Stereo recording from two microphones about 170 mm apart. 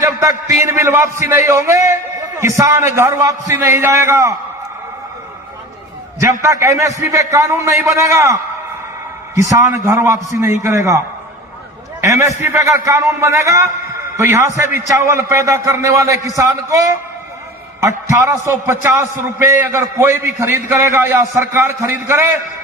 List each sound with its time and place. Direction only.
0.0 s a sound: 20° right (ahead or behind)
0.7 s a man's voice: 15° right (ahead or behind)
6.1 s a man's voice: 15° right (ahead or behind)
12.0 s a man's voice: 15° right (ahead or behind)